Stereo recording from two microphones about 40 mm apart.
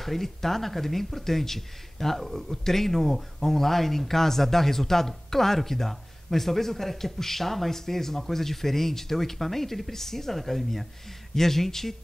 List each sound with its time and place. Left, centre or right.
0.0 s speech: centre